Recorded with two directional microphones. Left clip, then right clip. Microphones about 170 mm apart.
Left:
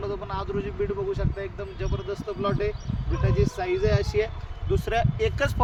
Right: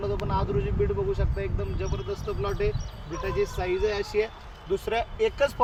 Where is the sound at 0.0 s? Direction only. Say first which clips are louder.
Right 2 dB; 10° left (ahead or behind).